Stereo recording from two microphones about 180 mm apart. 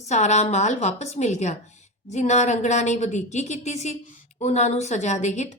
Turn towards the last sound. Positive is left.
turn(degrees=40)  # may be behind; listen again after turning